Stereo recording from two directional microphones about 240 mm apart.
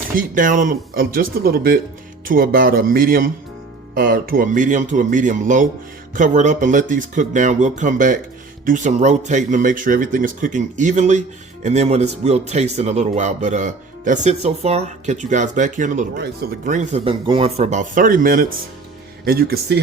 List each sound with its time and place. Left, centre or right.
0.1 s speech: right
16.1 s speech: right